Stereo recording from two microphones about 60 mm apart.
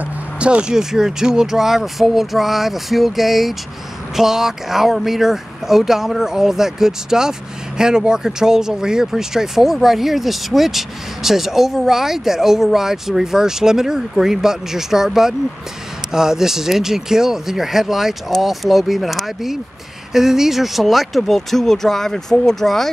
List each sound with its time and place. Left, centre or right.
0.4 s speech: centre